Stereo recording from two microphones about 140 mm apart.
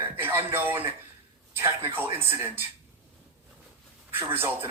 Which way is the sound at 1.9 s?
15° right (ahead or behind).